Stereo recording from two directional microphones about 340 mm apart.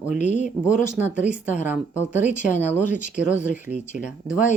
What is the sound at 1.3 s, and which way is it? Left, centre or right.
Speech, centre.